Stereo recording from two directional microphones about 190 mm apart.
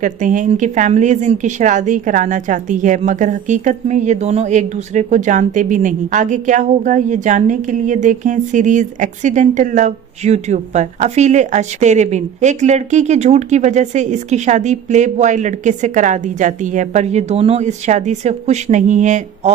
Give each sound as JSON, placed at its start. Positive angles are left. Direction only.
{"t": 0.0, "sound": "a woman's voice", "side_deg": -40}